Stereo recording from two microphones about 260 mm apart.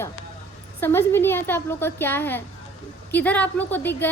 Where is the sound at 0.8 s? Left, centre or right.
Centre.